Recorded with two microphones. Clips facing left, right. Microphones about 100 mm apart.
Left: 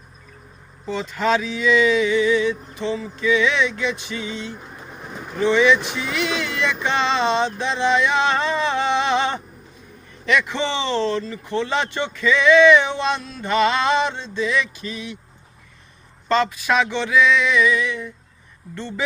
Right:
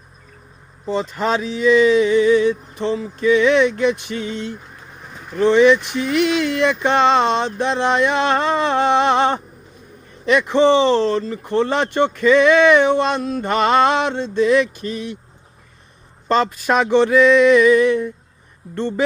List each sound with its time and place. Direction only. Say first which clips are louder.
0.9 s speech: right 1 dB; 40° right (ahead or behind)
4.8 s pigeon: left 3 dB; 10° left (ahead or behind)
5.4 s speech: right 4 dB; 45° right (ahead or behind)
16.3 s speech: right 2 dB; 45° right (ahead or behind)